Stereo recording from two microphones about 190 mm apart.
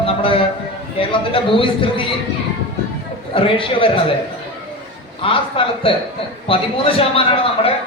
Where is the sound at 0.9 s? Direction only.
30° left (ahead or behind).